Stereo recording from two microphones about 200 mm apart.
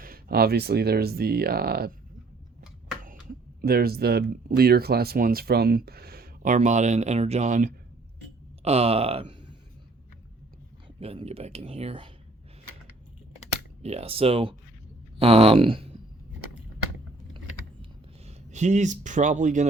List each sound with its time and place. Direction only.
0.0 s speech: 50° right (ahead or behind)
3.6 s speech: 50° right (ahead or behind); by 9.6 s 25° right (ahead or behind)
10.8 s speech: 30° right (ahead or behind)
13.8 s speech: 30° right (ahead or behind)
18.3 s a man's voice: 35° right (ahead or behind)